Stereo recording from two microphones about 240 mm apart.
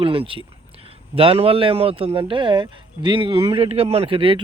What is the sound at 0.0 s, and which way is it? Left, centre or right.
Speech, right.